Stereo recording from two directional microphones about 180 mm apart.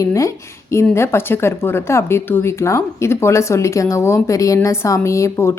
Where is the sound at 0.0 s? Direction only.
15° left (ahead or behind).